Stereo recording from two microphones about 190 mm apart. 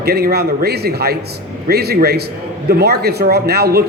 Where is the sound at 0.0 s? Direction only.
55° right (ahead or behind).